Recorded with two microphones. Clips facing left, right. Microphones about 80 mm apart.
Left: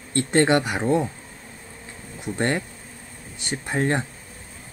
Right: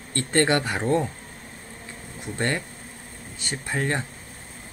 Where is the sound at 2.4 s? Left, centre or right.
Left.